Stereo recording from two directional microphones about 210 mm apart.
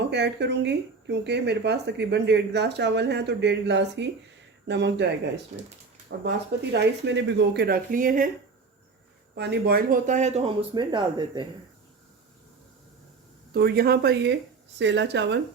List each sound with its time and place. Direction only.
0.1 s speech: 55° right (ahead or behind)
6.1 s a woman's voice: 50° right (ahead or behind)
9.3 s speech: 50° right (ahead or behind); by 11.4 s 20° right (ahead or behind)
13.5 s a woman's voice: 50° right (ahead or behind)